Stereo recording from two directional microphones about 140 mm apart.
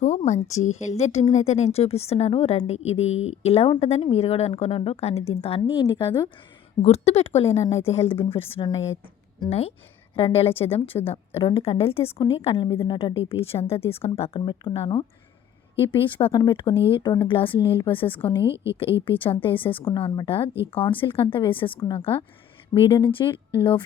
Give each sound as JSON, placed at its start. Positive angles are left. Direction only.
{"t": 0.3, "sound": "speech", "side_deg": 55}
{"t": 5.7, "sound": "speech", "side_deg": 35}
{"t": 6.8, "sound": "speech", "side_deg": 50}
{"t": 18.4, "sound": "a woman's voice", "side_deg": -20}
{"t": 19.0, "sound": "speech", "side_deg": 40}